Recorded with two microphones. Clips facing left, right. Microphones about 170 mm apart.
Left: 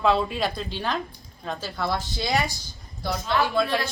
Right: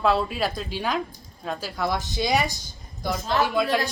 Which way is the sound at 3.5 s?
15° right (ahead or behind).